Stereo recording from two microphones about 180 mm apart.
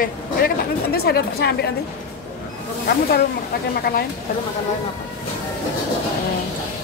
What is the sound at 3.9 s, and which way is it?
Speech, 60° left (ahead or behind).